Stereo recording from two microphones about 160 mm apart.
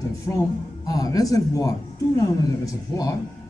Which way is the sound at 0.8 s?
25° left (ahead or behind).